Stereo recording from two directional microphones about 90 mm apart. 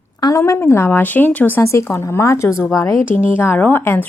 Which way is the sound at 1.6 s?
30° left (ahead or behind).